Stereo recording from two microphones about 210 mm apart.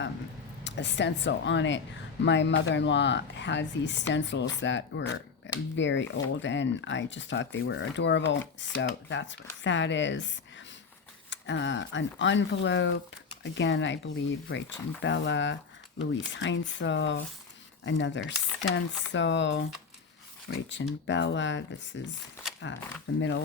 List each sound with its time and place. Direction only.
0.6 s speech: 55° left (ahead or behind)
23.1 s speech: 70° left (ahead or behind)